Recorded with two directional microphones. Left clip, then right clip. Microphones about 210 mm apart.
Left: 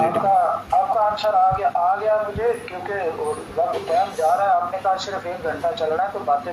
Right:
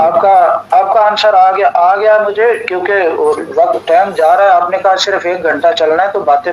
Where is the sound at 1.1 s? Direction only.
45° right (ahead or behind).